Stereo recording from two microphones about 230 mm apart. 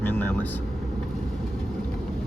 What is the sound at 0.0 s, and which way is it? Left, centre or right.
Vehicle, centre.